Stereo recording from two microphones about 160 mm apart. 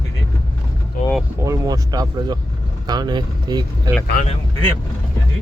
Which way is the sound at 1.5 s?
25° right (ahead or behind).